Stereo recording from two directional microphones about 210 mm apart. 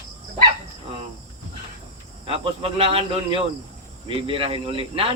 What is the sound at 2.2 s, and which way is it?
Speech, 25° right (ahead or behind).